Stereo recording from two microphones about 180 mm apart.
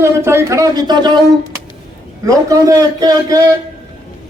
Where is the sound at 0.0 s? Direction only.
15° right (ahead or behind).